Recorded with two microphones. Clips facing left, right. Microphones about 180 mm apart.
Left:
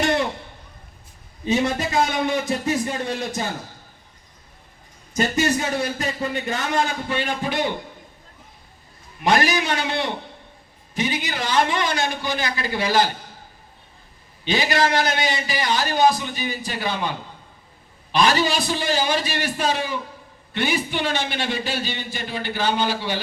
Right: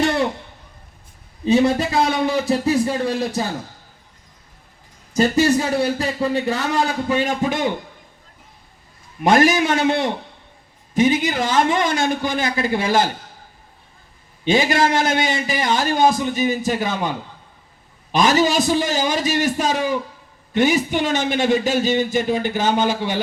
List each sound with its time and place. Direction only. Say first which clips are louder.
1.5 s a man's voice: right 6 dB; 30° right (ahead or behind)
5.1 s a man's voice: right 5 dB; 30° right (ahead or behind)
9.2 s a man's voice: right 5 dB; 50° right (ahead or behind)
14.4 s a man's voice: right 4 dB; 50° right (ahead or behind)
18.1 s a man's voice: right 3 dB; 45° right (ahead or behind)